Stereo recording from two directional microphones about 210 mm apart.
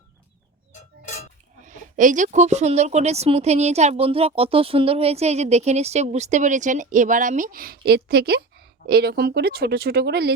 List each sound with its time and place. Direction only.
1.6 s a woman's voice: 35° right (ahead or behind)